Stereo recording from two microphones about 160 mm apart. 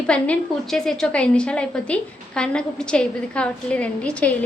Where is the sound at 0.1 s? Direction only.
5° left (ahead or behind).